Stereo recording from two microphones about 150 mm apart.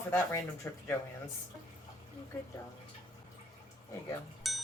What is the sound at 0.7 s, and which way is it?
Speech, 15° left (ahead or behind).